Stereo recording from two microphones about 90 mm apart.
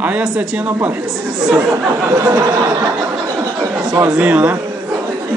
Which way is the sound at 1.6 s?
25° right (ahead or behind).